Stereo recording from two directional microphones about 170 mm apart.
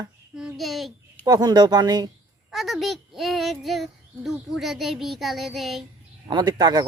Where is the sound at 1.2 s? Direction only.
25° right (ahead or behind).